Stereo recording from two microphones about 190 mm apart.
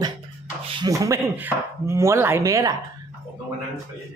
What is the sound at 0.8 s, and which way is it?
Speech, 15° right (ahead or behind).